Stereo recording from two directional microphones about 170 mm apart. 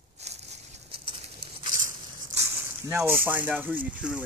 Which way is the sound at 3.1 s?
10° right (ahead or behind).